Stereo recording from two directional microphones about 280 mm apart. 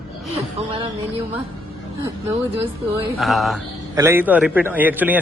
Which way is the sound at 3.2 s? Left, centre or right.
Centre.